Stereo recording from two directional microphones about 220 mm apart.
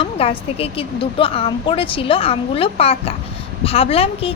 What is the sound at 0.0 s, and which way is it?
A woman's voice, 25° left (ahead or behind).